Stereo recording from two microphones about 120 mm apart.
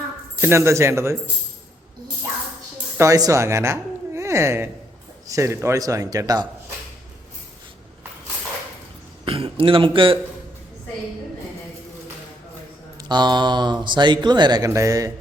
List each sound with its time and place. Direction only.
0.4 s a man's voice: 20° right (ahead or behind)
3.0 s a woman's voice: 30° right (ahead or behind)
9.2 s a sound: 50° right (ahead or behind)
13.0 s speech: 35° right (ahead or behind)